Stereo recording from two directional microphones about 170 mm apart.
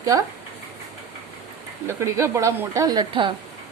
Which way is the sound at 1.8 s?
15° right (ahead or behind).